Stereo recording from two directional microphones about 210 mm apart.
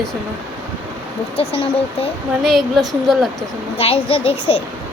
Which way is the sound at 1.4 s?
25° left (ahead or behind).